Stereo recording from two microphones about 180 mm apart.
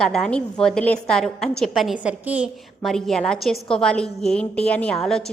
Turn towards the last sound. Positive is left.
turn(degrees=0)  # may be behind; listen again after turning